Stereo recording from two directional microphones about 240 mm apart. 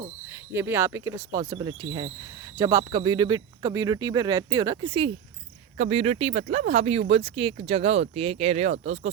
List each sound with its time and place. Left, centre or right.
0.5 s speech: centre; by 9.0 s right